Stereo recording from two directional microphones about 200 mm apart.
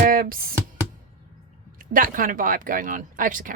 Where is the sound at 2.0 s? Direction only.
45° right (ahead or behind).